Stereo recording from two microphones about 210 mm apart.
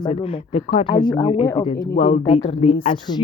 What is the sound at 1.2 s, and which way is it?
Speech, 20° left (ahead or behind).